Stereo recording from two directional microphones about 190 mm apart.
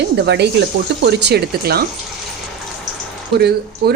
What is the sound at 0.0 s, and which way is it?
A woman's voice, 60° right (ahead or behind).